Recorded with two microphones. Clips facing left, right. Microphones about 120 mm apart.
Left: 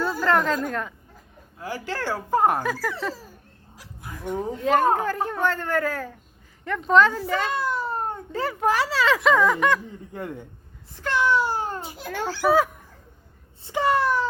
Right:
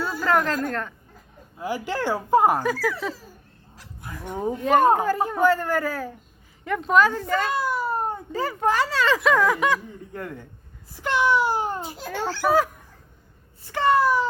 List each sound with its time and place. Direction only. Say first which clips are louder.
0.0 s a sound: left 1 dB; 5° right (ahead or behind)
0.6 s speech: right 1 dB; 5° left (ahead or behind)
1.5 s a man's voice: right 3 dB; 15° right (ahead or behind)
2.5 s speech: right 2 dB; centre (ahead or behind)
4.3 s a man's voice: right 1 dB; 10° right (ahead or behind)
10.1 s a man's voice: left 1 dB; 20° left (ahead or behind)
10.9 s a man's voice: right 1 dB; 15° right (ahead or behind)
12.3 s speech: left 1 dB; 5° left (ahead or behind)
13.6 s a child's voice: left 2 dB; 25° left (ahead or behind)
13.8 s speech: right 3 dB; centre (ahead or behind)